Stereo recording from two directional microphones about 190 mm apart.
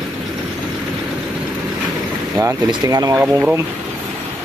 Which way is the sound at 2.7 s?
20° right (ahead or behind).